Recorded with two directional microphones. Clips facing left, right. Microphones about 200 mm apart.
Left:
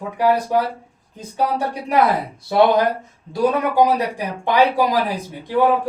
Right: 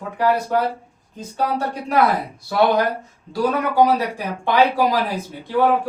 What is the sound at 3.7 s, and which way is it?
Speech, 15° left (ahead or behind).